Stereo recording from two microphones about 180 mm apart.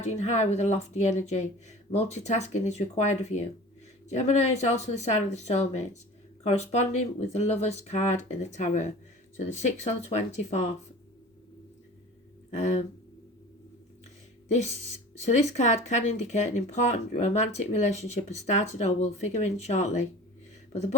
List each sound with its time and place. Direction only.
0.0 s speech: 40° left (ahead or behind)
12.5 s speech: 40° left (ahead or behind)
15.2 s speech: 40° left (ahead or behind)